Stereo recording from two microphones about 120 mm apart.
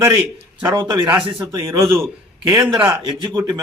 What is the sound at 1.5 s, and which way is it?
Speech, 20° right (ahead or behind).